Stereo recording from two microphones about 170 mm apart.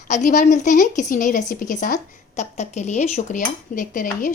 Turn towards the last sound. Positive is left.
turn(degrees=50)  # may be behind; listen again after turning